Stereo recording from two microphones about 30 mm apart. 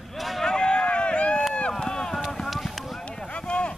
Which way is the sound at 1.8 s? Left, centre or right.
Centre.